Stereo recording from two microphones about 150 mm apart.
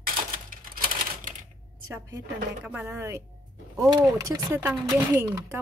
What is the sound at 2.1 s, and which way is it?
Speech, 15° right (ahead or behind).